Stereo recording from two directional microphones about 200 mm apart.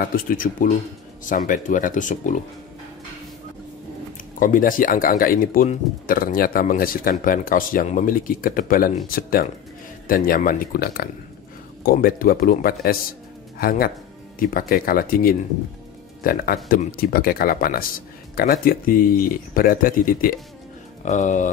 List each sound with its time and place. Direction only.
0.1 s speech: 45° left (ahead or behind)
4.4 s speech: 45° left (ahead or behind)